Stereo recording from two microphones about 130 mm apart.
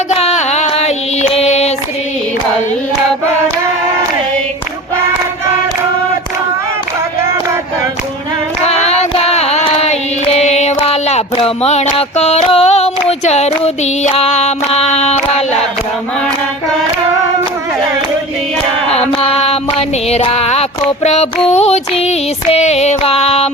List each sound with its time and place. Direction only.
0.2 s female singing: 55° left (ahead or behind)
8.6 s female singing: 55° left (ahead or behind)
14.0 s a sound: 55° left (ahead or behind)
18.9 s music: 50° left (ahead or behind)